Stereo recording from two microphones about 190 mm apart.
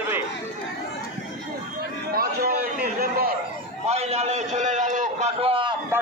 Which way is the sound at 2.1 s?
55° right (ahead or behind).